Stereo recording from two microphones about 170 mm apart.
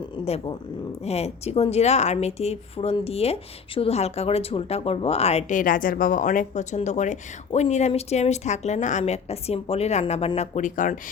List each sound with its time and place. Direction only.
0.3 s speech: 35° left (ahead or behind)